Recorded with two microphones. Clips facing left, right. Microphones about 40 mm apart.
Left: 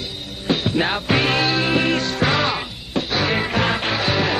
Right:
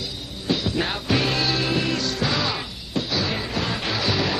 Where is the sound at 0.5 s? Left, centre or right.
Left.